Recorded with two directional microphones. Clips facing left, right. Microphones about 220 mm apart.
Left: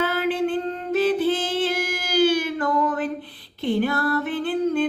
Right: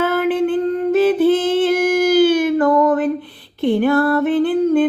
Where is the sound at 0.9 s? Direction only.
55° right (ahead or behind).